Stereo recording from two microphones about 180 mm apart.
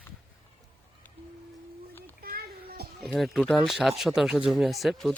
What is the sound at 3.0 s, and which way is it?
Speech, centre (ahead or behind).